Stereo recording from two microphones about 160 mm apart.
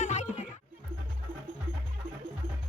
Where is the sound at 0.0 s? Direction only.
45° left (ahead or behind).